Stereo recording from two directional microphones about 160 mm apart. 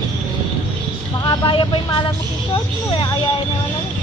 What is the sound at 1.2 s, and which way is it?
Vehicle, 30° left (ahead or behind).